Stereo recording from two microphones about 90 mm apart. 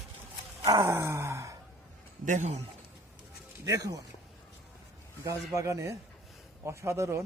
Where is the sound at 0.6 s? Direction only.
40° right (ahead or behind).